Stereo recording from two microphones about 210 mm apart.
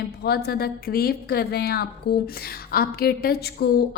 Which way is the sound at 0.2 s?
50° left (ahead or behind).